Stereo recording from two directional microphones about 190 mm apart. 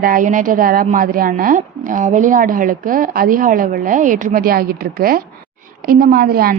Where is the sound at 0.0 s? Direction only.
45° right (ahead or behind).